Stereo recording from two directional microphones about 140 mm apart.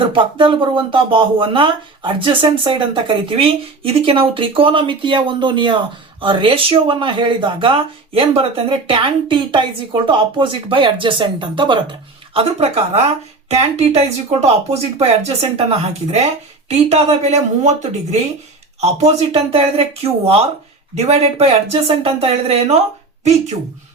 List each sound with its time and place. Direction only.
0.1 s speech: 35° right (ahead or behind)
18.8 s speech: 50° right (ahead or behind)